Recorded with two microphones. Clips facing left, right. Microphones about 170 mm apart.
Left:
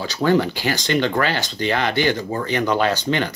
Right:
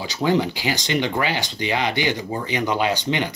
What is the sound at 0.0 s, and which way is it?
Speech, 15° right (ahead or behind).